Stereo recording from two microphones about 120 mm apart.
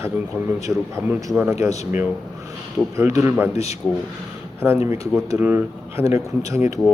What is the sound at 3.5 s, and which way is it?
Speech, 60° left (ahead or behind).